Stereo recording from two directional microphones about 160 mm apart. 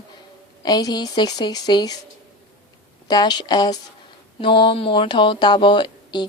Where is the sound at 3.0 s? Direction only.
25° left (ahead or behind).